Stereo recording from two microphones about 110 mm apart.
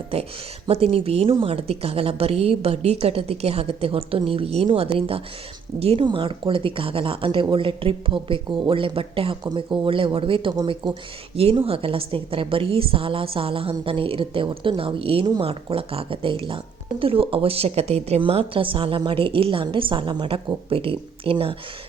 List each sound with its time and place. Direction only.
0.1 s a woman's voice: 60° right (ahead or behind)
6.1 s speech: 50° right (ahead or behind)
10.8 s speech: 40° right (ahead or behind)
11.3 s a woman's voice: 60° right (ahead or behind)
18.2 s a woman's voice: 60° right (ahead or behind)